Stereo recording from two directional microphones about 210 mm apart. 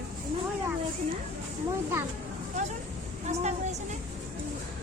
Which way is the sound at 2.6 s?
35° right (ahead or behind).